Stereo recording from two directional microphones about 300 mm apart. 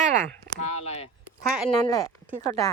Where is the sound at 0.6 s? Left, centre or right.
Left.